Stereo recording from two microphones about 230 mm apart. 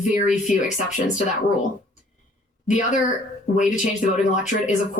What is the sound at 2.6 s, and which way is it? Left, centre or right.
Speech, left.